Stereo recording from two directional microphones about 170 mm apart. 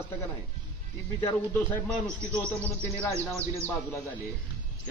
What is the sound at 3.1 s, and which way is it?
Speech, 15° right (ahead or behind).